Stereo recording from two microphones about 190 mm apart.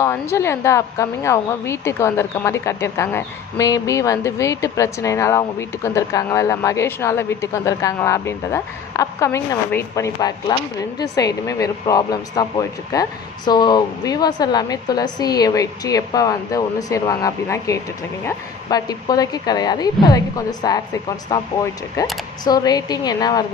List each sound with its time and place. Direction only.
0.0 s a woman's voice: 15° left (ahead or behind)
22.4 s a woman's voice: 20° left (ahead or behind)